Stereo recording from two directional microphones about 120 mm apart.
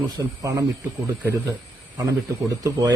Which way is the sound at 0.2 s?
25° right (ahead or behind).